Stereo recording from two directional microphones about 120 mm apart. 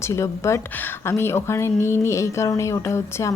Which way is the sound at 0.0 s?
25° left (ahead or behind).